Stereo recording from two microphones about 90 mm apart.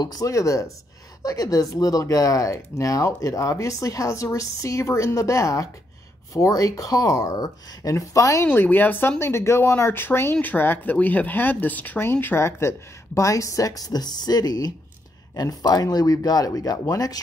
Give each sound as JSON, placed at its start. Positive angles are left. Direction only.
{"t": 0.0, "sound": "speech", "side_deg": 45}
{"t": 8.5, "sound": "speech", "side_deg": 20}